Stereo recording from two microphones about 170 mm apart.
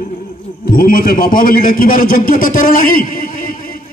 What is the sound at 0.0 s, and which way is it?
A man's voice, 60° left (ahead or behind).